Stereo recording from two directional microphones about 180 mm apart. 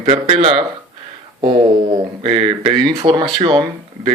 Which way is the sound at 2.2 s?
30° right (ahead or behind).